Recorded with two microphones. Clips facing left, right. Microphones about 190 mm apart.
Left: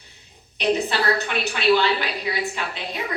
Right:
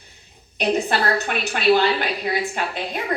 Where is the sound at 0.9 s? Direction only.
50° right (ahead or behind).